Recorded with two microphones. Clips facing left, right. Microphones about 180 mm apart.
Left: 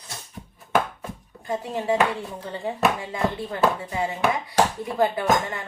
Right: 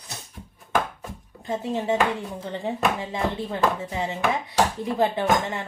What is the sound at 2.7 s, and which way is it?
Speech, 25° right (ahead or behind).